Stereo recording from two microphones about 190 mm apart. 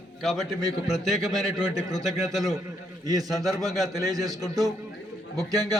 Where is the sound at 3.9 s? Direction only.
20° right (ahead or behind).